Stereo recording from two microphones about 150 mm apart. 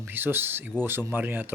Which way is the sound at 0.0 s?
15° right (ahead or behind).